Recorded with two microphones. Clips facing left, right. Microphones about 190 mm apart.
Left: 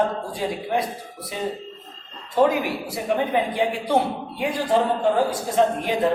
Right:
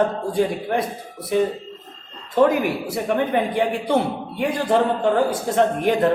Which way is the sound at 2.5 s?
60° right (ahead or behind).